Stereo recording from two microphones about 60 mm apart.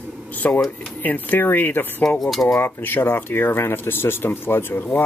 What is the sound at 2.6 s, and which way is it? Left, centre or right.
Speech, left.